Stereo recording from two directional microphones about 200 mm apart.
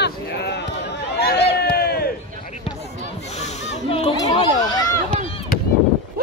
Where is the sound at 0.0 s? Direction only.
55° left (ahead or behind).